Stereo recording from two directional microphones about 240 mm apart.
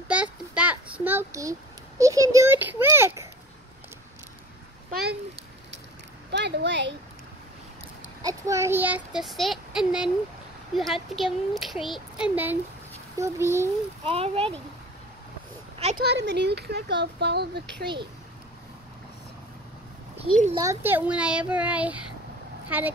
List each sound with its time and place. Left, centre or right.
0.1 s a sound: centre
6.3 s speech: right
8.2 s a child's voice: centre
14.0 s speech: right
16.0 s speech: right
20.5 s a child's voice: centre